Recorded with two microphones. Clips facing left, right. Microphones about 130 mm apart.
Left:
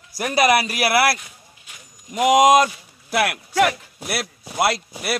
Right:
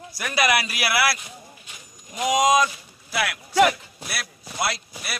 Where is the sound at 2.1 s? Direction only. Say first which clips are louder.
Left 6 dB; 70° left (ahead or behind).